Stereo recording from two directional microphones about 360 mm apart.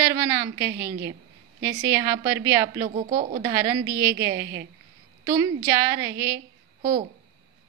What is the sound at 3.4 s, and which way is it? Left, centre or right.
A woman's voice, centre.